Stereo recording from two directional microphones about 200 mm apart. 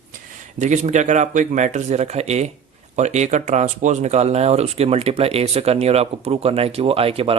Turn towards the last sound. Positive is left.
turn(degrees=-30)  # may be behind; listen again after turning